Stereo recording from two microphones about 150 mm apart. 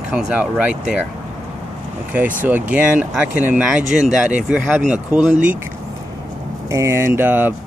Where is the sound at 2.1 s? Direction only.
10° right (ahead or behind).